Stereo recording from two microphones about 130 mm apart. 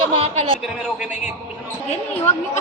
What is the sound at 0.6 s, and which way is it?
Speech, 10° right (ahead or behind).